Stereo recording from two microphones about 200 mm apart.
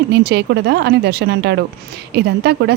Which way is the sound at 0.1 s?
55° right (ahead or behind).